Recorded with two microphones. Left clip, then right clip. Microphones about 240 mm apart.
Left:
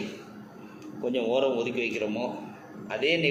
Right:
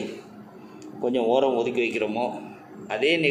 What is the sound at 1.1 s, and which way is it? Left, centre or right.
A man's voice, right.